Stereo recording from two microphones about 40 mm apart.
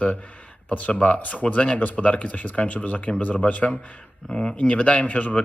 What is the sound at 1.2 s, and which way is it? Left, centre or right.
Speech, left.